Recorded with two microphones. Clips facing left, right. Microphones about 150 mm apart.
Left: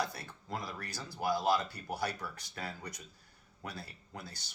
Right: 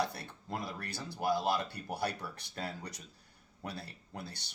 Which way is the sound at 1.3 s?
25° right (ahead or behind).